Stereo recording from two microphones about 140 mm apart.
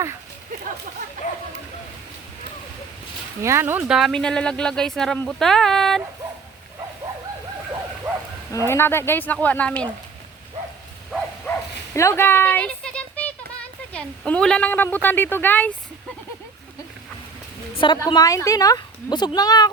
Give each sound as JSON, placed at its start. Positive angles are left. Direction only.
{"t": 1.2, "sound": "bow-wow", "side_deg": 65}
{"t": 3.4, "sound": "speech", "side_deg": -15}
{"t": 3.8, "sound": "speech", "side_deg": 0}
{"t": 8.6, "sound": "speech", "side_deg": 15}
{"t": 11.5, "sound": "bow-wow", "side_deg": 15}
{"t": 11.9, "sound": "speech", "side_deg": 20}
{"t": 17.7, "sound": "a woman's voice", "side_deg": 35}